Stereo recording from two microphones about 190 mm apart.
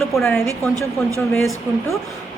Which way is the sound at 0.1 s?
Centre (ahead or behind).